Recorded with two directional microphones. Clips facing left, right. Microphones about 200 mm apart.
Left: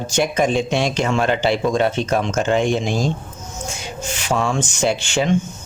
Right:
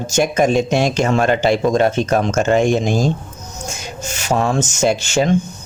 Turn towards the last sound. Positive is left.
turn(degrees=-45)  # may be behind; listen again after turning